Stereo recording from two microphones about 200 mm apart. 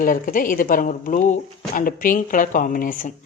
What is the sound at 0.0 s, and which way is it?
Speech, 45° left (ahead or behind).